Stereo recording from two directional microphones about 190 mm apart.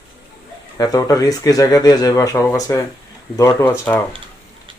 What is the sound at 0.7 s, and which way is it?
Speech, 20° left (ahead or behind).